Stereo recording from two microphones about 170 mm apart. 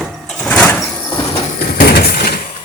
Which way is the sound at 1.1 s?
25° left (ahead or behind).